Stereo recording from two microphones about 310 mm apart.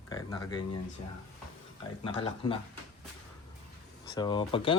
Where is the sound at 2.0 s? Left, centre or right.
Centre.